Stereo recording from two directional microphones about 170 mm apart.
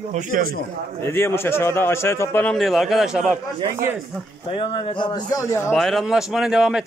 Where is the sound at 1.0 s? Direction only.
15° left (ahead or behind).